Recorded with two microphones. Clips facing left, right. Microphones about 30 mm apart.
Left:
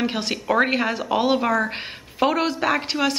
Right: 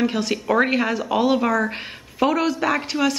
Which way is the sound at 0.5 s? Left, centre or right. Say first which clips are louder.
Even; centre.